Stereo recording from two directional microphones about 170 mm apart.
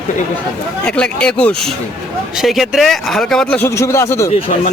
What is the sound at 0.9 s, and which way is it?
Speech, 5° left (ahead or behind).